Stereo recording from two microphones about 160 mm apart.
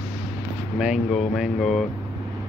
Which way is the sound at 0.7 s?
Centre (ahead or behind).